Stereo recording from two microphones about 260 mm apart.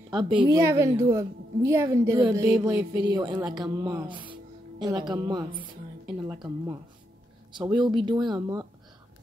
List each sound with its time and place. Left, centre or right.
0.2 s a woman's voice: centre